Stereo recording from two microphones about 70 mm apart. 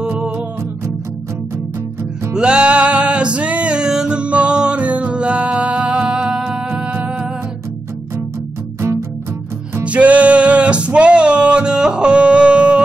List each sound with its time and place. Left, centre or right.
2.3 s music: centre
6.7 s humming: right
9.8 s a sound: centre